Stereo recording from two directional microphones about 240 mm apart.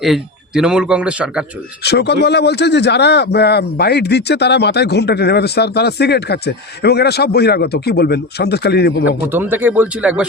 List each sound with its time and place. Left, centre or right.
0.0 s speech: centre
1.8 s a man's voice: left
9.3 s speech: centre